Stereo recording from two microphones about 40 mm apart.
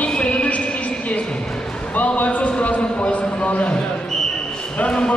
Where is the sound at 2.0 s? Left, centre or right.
Left.